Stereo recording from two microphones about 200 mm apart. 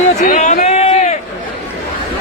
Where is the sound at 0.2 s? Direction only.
40° left (ahead or behind).